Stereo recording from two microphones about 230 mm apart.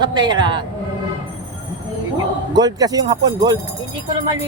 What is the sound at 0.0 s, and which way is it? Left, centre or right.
Speech, centre.